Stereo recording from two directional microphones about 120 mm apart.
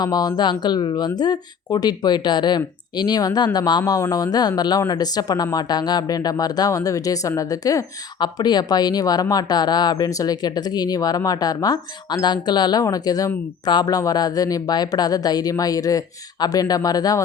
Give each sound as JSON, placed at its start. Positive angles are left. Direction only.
{"t": 0.0, "sound": "speech", "side_deg": 30}